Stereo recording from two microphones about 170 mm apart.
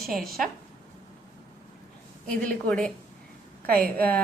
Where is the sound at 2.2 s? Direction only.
5° left (ahead or behind).